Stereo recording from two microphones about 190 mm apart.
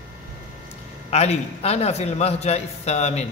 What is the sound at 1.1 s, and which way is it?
A man's voice, 35° left (ahead or behind).